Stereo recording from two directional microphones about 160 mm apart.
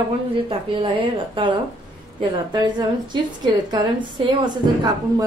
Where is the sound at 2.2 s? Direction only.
25° right (ahead or behind).